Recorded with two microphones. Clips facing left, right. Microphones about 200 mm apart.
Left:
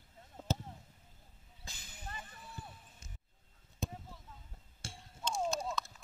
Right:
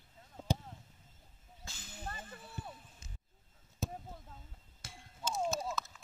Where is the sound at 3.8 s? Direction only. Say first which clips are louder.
Right 1 dB; 5° right (ahead or behind).